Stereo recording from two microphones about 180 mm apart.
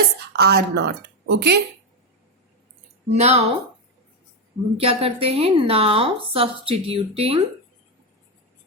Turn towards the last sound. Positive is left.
turn(degrees=-30)  # may be behind; listen again after turning